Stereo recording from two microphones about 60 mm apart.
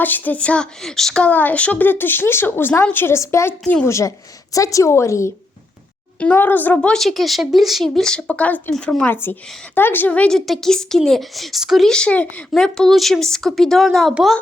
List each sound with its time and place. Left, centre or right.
0.0 s a woman's voice: left
0.8 s speech: centre
1.2 s speech: left
3.2 s a woman's voice: left
6.1 s a woman's voice: left
6.8 s speech: centre
8.3 s a woman's voice: left
10.2 s speech: centre
11.9 s a woman's voice: centre
12.5 s speech: centre